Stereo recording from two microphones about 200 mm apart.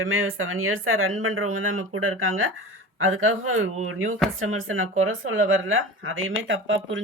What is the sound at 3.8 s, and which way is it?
Speech, 75° right (ahead or behind).